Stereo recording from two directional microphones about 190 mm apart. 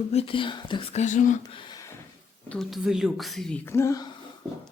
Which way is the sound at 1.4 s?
20° left (ahead or behind).